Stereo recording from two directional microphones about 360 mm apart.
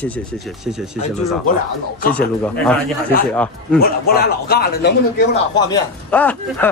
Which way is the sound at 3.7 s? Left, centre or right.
Left.